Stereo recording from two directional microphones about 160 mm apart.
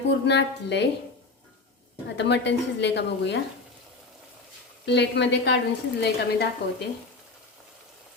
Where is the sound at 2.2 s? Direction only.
90° left.